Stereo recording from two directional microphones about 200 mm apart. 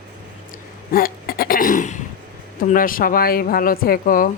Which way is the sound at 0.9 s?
45° left (ahead or behind).